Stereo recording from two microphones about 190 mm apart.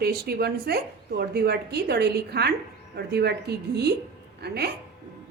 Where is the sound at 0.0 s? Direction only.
55° right (ahead or behind).